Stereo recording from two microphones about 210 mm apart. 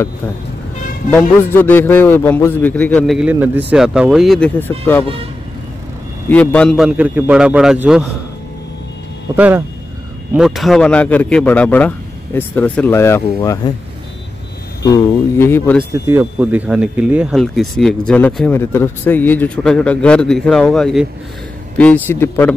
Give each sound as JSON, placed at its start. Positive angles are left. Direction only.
{"t": 1.1, "sound": "a man's voice", "side_deg": 10}
{"t": 6.3, "sound": "speech", "side_deg": 5}
{"t": 9.3, "sound": "a man's voice", "side_deg": -10}
{"t": 14.8, "sound": "a man's voice", "side_deg": 15}
{"t": 15.9, "sound": "a man's voice", "side_deg": -10}